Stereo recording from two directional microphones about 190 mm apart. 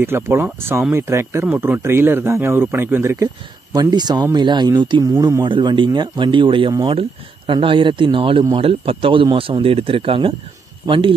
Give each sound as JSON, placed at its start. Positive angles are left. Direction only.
{"t": 0.0, "sound": "speech", "side_deg": -10}